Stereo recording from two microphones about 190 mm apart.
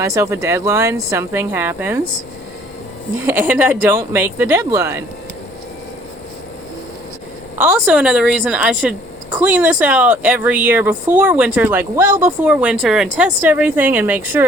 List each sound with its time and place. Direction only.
0.0 s speech: 15° right (ahead or behind)
3.2 s speech: 10° right (ahead or behind)
7.6 s a woman's voice: 5° right (ahead or behind)